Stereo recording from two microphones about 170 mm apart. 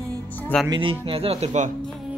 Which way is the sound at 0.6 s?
25° right (ahead or behind).